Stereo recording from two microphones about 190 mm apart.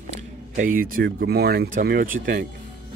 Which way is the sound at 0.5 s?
45° right (ahead or behind).